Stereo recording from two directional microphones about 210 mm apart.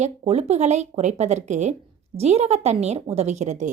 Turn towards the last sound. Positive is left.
turn(degrees=-35)  # may be behind; listen again after turning